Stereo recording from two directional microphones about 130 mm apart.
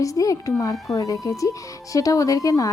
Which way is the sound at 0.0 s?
25° left (ahead or behind).